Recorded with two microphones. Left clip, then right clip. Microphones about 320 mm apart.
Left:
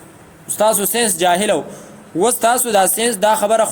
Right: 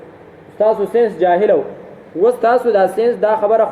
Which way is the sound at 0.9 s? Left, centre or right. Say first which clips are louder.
Right 3 dB; left.